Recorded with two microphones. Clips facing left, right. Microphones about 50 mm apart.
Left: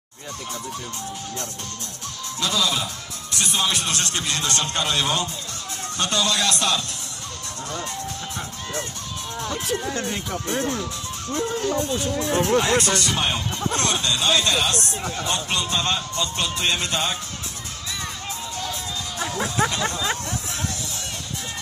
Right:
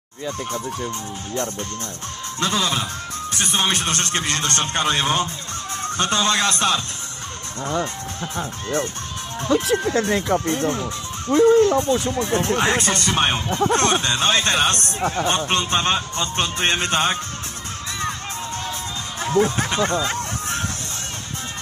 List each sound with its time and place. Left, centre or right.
2.4 s speech: right
9.5 s speech: right
10.6 s speech: right
11.3 s speech: right
12.4 s speech: right
12.6 s speech: right
18.6 s music: right